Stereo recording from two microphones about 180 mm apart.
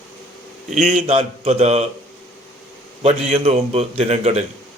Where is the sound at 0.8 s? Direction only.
40° right (ahead or behind).